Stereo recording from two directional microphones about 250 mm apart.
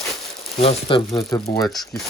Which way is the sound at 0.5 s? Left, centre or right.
Left.